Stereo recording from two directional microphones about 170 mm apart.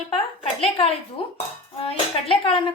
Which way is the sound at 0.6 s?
35° left (ahead or behind).